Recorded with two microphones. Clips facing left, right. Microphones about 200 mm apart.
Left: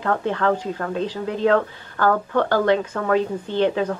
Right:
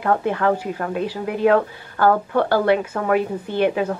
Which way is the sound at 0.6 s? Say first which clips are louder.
Right 1 dB; 15° right (ahead or behind).